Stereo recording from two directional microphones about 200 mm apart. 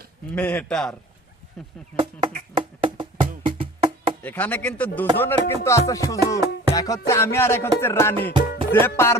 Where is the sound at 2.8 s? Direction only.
25° right (ahead or behind).